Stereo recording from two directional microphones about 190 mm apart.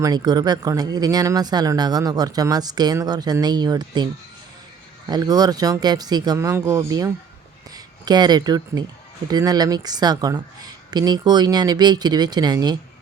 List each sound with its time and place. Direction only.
0.0 s speech: 20° right (ahead or behind)